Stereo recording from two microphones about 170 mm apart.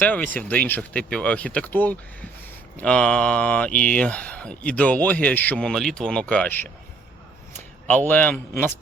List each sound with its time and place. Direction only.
0.0 s speech: 10° left (ahead or behind)
7.9 s speech: 10° left (ahead or behind)